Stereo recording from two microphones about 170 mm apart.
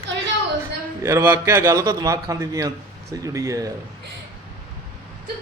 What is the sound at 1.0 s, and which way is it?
A man's voice, 15° right (ahead or behind).